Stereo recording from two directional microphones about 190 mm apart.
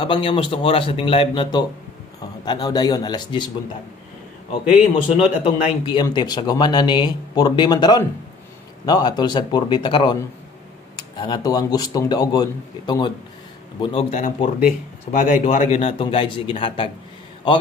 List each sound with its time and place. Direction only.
0.0 s speech: 25° left (ahead or behind)
5.1 s speech: 30° left (ahead or behind)
14.1 s speech: 40° left (ahead or behind)